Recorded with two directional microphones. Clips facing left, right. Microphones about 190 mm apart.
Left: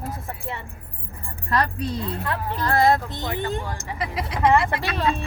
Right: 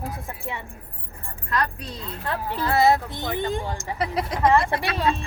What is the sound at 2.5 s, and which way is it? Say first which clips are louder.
Speech: even; 5° right (ahead or behind).